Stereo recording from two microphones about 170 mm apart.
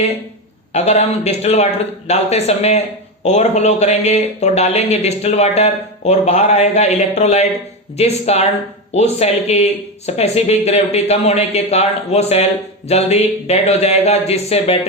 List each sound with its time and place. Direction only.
0.7 s speech: 40° left (ahead or behind)